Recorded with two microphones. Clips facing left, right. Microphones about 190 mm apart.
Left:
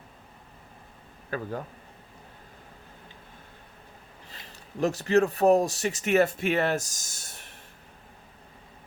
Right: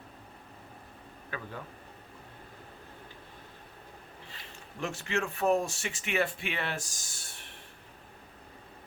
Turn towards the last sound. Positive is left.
turn(degrees=40)  # may be behind; listen again after turning